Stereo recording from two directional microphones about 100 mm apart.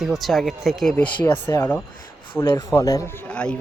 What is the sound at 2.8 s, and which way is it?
Speech, 35° left (ahead or behind).